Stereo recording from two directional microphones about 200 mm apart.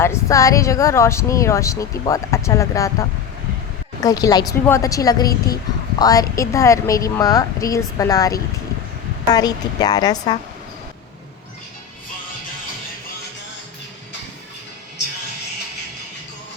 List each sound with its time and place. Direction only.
0.0 s a woman's voice: 15° left (ahead or behind)